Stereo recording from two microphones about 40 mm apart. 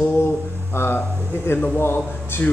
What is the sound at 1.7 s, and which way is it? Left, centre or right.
Speech, left.